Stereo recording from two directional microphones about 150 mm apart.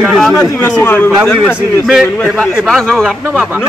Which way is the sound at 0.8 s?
10° left (ahead or behind).